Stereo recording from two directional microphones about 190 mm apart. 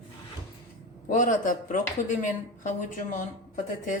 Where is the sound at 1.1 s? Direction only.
45° left (ahead or behind).